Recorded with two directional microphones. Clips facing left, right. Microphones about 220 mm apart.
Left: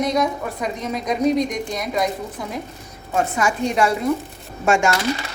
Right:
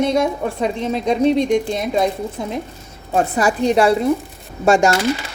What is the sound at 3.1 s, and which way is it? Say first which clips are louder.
A woman's voice: right 4 dB; 35° right (ahead or behind).